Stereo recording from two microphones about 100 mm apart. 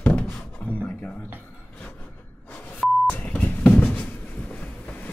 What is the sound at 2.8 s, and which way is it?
Beep, centre (ahead or behind).